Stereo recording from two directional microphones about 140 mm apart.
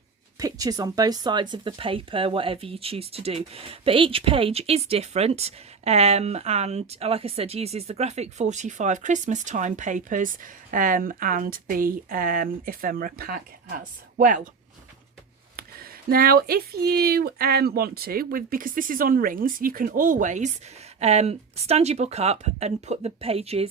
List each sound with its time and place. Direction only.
0.3 s speech: 25° right (ahead or behind); by 14.4 s 85° right
15.5 s speech: 90° right; by 20.5 s 60° right (ahead or behind)
21.0 s speech: 50° right (ahead or behind)